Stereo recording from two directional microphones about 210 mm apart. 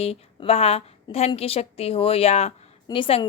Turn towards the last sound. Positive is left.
turn(degrees=25)  # may be behind; listen again after turning